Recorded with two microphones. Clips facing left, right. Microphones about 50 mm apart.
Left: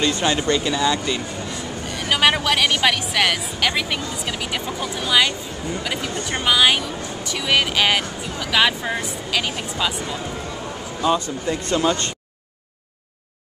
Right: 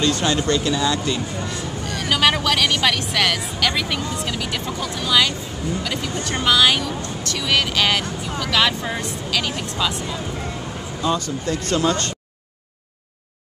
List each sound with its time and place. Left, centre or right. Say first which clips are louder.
0.0 s speech: even; centre
11.0 s speech: left 2 dB; centre